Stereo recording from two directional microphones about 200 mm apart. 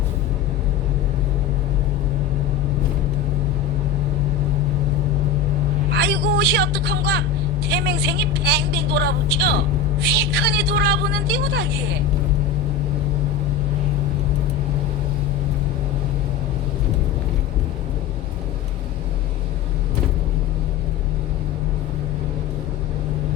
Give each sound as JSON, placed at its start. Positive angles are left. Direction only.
{"t": 5.9, "sound": "a woman's voice", "side_deg": -55}